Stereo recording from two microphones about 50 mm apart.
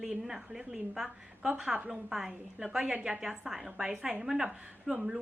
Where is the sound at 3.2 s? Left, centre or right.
Centre.